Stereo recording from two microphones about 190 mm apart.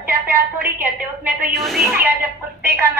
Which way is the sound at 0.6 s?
10° right (ahead or behind).